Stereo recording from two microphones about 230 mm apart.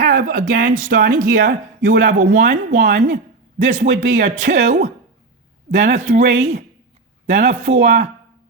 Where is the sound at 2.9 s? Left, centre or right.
Right.